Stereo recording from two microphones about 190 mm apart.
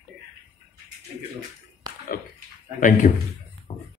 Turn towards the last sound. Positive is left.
turn(degrees=45)  # may be behind; listen again after turning